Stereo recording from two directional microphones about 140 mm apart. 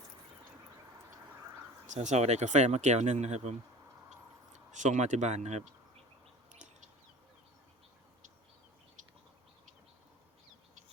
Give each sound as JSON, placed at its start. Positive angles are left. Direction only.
{"t": 1.3, "sound": "a sound", "side_deg": -15}
{"t": 1.9, "sound": "speech", "side_deg": -55}
{"t": 4.7, "sound": "speech", "side_deg": -60}